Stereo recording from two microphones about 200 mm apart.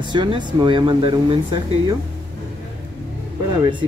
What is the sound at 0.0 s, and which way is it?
Speech, 25° right (ahead or behind).